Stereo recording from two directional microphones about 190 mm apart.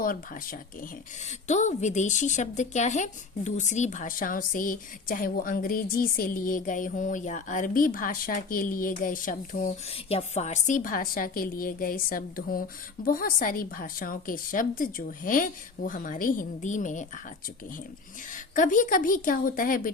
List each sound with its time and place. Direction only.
0.0 s speech: 50° left (ahead or behind)
18.3 s speech: 45° left (ahead or behind)